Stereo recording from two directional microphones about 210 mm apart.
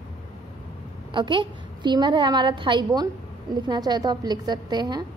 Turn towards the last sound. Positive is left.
turn(degrees=-20)  # may be behind; listen again after turning